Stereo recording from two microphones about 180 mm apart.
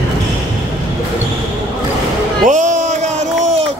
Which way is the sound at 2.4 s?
40° right (ahead or behind).